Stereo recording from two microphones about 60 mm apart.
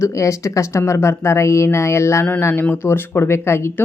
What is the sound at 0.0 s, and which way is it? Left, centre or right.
A woman's voice, left.